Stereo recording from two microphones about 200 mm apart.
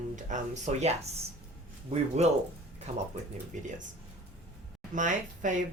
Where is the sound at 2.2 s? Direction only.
35° right (ahead or behind).